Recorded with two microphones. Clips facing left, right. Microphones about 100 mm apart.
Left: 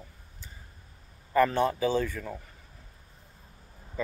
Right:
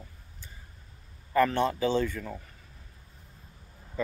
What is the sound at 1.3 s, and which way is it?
Speech, 10° left (ahead or behind).